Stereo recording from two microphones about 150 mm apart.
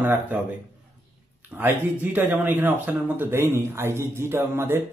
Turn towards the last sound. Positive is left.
turn(degrees=-15)  # may be behind; listen again after turning